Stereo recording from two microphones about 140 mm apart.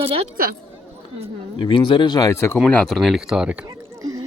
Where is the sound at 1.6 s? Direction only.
35° left (ahead or behind); by 2.6 s 20° left (ahead or behind).